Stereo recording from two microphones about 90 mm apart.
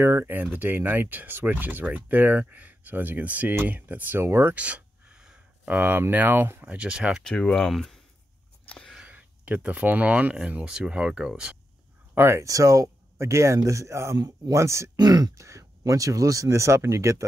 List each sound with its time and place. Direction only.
0.0 s speech: 25° right (ahead or behind)
4.6 s a sound: 15° right (ahead or behind)
5.8 s speech: 20° right (ahead or behind)
6.6 s speech: 10° right (ahead or behind)
7.2 s speech: 5° left (ahead or behind)
8.6 s a sound: 10° left (ahead or behind)
8.9 s speech: 15° right (ahead or behind)
12.1 s speech: 25° right (ahead or behind)
15.0 s speech: 45° right (ahead or behind)